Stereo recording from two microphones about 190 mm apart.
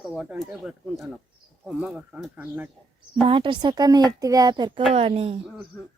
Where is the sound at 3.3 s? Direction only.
25° right (ahead or behind).